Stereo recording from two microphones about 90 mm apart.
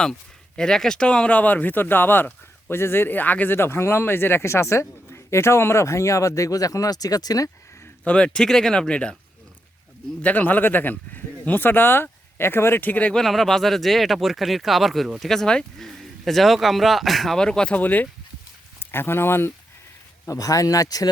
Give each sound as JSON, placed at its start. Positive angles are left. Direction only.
{"t": 0.0, "sound": "speech", "side_deg": 5}
{"t": 8.0, "sound": "speech", "side_deg": 10}
{"t": 10.2, "sound": "speech", "side_deg": 15}
{"t": 13.2, "sound": "speech", "side_deg": 0}
{"t": 20.2, "sound": "speech", "side_deg": 40}